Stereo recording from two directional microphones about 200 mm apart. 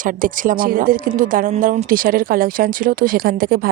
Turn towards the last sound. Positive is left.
turn(degrees=-45)  # may be behind; listen again after turning